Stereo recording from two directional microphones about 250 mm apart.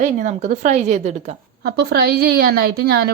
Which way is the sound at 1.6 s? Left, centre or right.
Right.